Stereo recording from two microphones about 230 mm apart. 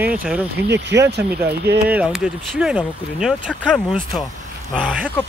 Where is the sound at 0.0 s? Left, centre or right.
Centre.